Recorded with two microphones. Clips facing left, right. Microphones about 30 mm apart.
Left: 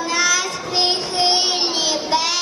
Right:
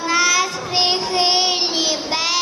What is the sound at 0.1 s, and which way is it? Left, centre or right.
Child singing, centre.